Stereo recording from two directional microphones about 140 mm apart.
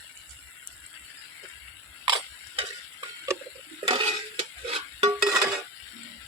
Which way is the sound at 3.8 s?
40° right (ahead or behind).